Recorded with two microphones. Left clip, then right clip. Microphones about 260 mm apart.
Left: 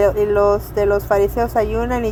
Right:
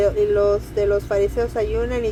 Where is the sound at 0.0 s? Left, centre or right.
Left.